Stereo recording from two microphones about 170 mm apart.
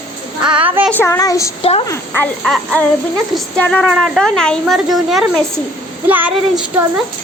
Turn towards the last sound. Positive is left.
turn(degrees=-5)  # may be behind; listen again after turning